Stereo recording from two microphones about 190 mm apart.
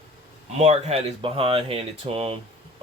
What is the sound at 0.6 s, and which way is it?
Speech, 35° right (ahead or behind).